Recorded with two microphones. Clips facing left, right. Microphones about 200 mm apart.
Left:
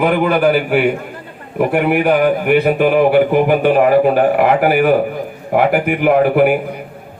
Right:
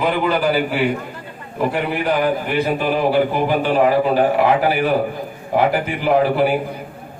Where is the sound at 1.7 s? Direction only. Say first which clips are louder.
Left 6 dB; 60° left (ahead or behind).